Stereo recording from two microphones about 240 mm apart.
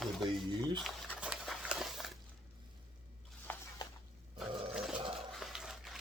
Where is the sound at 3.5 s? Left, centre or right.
Centre.